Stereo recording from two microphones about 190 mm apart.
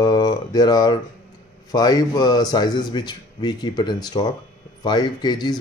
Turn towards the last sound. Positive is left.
turn(degrees=20)  # may be behind; listen again after turning